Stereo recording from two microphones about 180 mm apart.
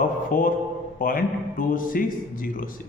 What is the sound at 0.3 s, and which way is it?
A man's voice, 50° left (ahead or behind).